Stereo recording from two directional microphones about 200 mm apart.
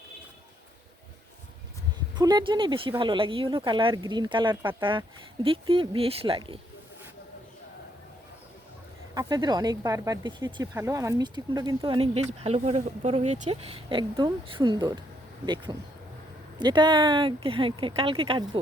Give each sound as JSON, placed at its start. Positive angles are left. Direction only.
{"t": 2.1, "sound": "speech", "side_deg": -20}
{"t": 9.1, "sound": "speech", "side_deg": -20}